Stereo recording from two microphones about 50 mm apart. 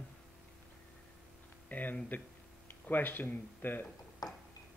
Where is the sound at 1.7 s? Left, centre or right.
Left.